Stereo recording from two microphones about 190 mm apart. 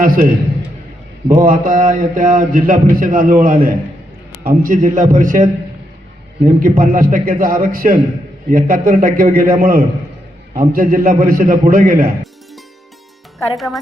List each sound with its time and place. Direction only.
0.0 s mantra: 50° right (ahead or behind)
1.3 s mantra: 45° right (ahead or behind)